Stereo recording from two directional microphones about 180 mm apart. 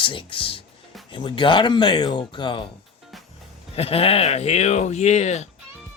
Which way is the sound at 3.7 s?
35° left (ahead or behind).